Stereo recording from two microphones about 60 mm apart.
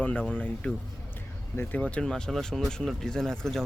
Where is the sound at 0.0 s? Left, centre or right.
Left.